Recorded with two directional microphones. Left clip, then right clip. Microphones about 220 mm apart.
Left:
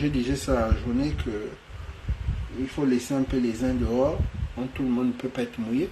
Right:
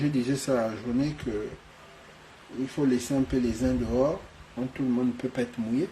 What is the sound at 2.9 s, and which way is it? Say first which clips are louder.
Speech: left 1 dB; 5° right (ahead or behind).